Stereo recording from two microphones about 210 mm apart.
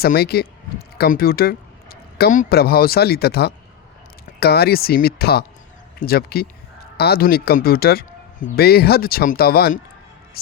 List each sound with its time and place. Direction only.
0.0 s speech: 50° left (ahead or behind)